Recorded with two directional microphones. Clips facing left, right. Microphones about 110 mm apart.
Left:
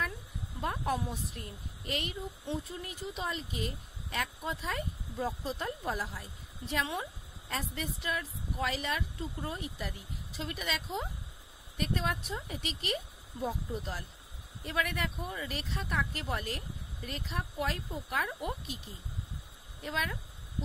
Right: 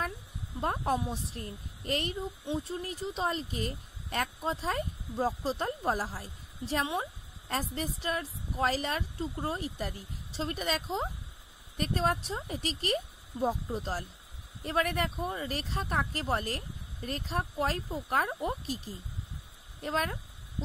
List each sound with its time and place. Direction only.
0.6 s speech: 35° right (ahead or behind)
19.8 s speech: 40° right (ahead or behind)